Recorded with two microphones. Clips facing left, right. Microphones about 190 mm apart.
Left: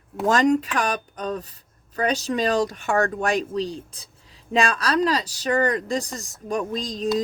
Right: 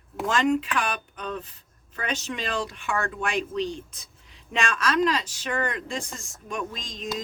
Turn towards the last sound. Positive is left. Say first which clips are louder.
# left 9 dB
turn(degrees=35)  # may be behind; listen again after turning